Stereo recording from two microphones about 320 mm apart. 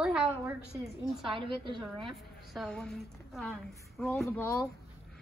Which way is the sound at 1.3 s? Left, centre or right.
Centre.